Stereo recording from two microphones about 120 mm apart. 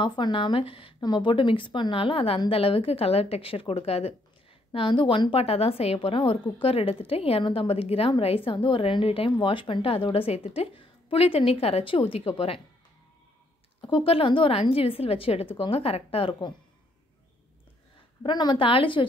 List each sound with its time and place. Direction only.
0.0 s a woman's voice: 40° left (ahead or behind); by 4.1 s 55° left (ahead or behind)
4.7 s a woman's voice: 45° left (ahead or behind)
5.4 s a woman's voice: 55° left (ahead or behind)
13.7 s a woman's voice: 45° left (ahead or behind)
18.2 s a woman's voice: 40° left (ahead or behind)